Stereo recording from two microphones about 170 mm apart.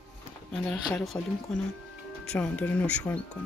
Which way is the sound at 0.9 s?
Centre (ahead or behind).